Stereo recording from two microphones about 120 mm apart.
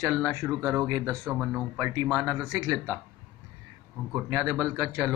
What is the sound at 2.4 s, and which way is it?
Speech, 30° right (ahead or behind).